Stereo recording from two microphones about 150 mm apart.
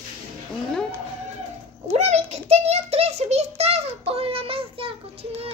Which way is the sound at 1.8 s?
45° right (ahead or behind).